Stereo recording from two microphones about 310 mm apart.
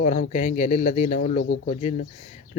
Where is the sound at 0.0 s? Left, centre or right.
Left.